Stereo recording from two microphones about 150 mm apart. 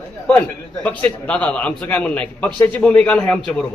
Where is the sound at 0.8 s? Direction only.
10° left (ahead or behind).